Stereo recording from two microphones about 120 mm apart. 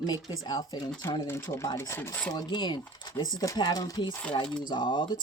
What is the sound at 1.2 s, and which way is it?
Speech, 20° left (ahead or behind).